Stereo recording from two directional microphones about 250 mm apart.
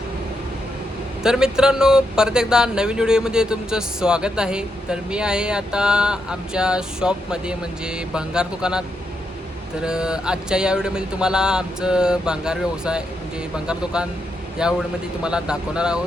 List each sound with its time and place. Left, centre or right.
1.2 s speech: centre
9.8 s speech: centre